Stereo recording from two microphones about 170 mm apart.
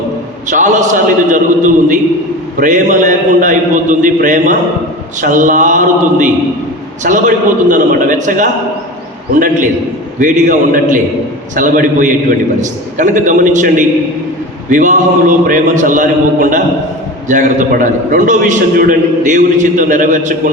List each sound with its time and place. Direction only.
0.4 s a man's voice: 45° right (ahead or behind)
10.2 s a man's voice: 50° right (ahead or behind)